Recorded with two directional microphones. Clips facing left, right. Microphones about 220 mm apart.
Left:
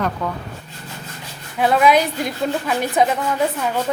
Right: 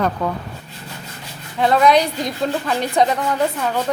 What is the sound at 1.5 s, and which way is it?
Speech, 5° left (ahead or behind).